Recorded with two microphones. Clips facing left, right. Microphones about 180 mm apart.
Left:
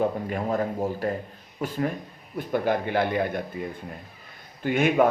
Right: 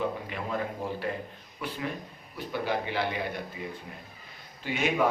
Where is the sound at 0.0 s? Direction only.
45° left (ahead or behind).